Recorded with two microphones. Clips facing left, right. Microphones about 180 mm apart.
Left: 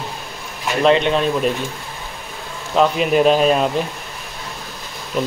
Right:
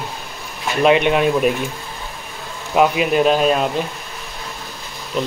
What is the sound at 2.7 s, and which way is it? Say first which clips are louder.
Speech: even; 10° right (ahead or behind).